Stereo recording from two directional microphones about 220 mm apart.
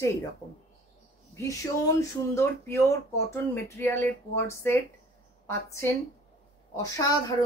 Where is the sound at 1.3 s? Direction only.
15° left (ahead or behind).